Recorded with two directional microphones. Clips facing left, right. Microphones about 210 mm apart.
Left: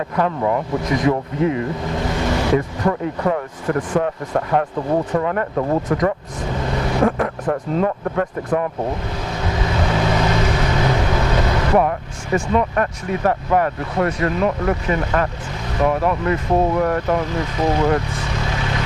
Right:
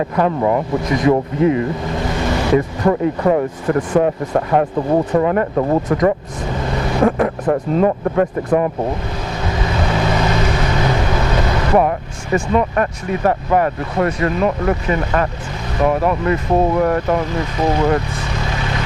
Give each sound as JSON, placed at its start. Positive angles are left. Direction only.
{"t": 0.1, "sound": "speech", "side_deg": -15}
{"t": 4.7, "sound": "speech", "side_deg": -25}
{"t": 5.2, "sound": "speech", "side_deg": -15}
{"t": 9.4, "sound": "vehicle", "side_deg": -15}
{"t": 11.8, "sound": "speech", "side_deg": -10}